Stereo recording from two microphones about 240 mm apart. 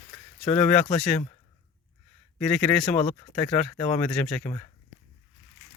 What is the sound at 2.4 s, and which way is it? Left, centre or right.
Speech, centre.